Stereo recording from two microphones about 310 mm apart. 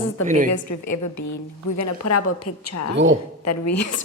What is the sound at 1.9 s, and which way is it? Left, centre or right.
A woman's voice, left.